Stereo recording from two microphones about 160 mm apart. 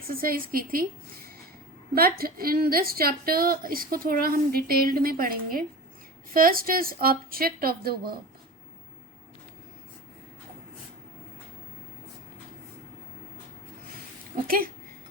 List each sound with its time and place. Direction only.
0.1 s a woman's voice: 65° right (ahead or behind)
2.0 s a woman's voice: 70° right (ahead or behind)
14.3 s speech: 65° right (ahead or behind)